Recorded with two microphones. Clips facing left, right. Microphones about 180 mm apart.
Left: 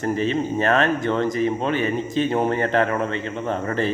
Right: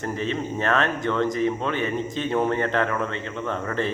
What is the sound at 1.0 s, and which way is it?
Speech, 35° left (ahead or behind).